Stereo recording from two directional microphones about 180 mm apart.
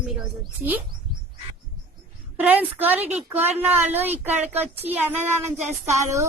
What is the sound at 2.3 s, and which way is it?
A woman's voice, 10° right (ahead or behind).